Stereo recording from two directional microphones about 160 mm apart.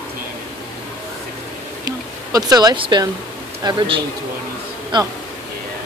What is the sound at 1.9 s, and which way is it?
A man's voice, 20° right (ahead or behind).